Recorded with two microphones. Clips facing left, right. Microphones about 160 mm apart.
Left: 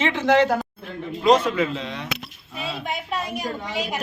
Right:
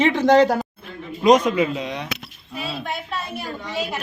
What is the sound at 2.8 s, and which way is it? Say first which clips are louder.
A woman's voice: left 1 dB; 15° left (ahead or behind).